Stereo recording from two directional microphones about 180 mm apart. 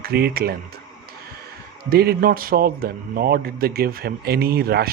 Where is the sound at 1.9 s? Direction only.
55° right (ahead or behind).